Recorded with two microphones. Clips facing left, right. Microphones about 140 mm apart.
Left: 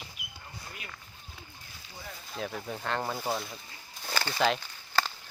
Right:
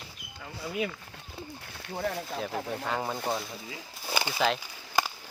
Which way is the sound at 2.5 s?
90° right.